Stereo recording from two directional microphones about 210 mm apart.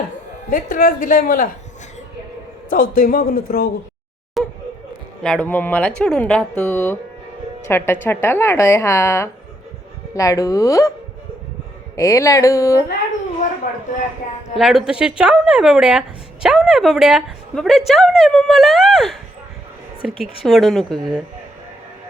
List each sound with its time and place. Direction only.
0.5 s a woman's voice: 40° left (ahead or behind)
2.6 s a man's voice: 40° left (ahead or behind)
4.4 s a sound: centre (ahead or behind)
5.2 s a woman's voice: 5° left (ahead or behind)
11.9 s speech: 15° left (ahead or behind)
13.7 s a woman's voice: 40° left (ahead or behind)
14.6 s a woman's voice: centre (ahead or behind)
20.2 s a woman's voice: centre (ahead or behind)